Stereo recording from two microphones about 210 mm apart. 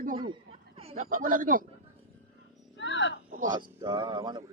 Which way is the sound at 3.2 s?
40° right (ahead or behind).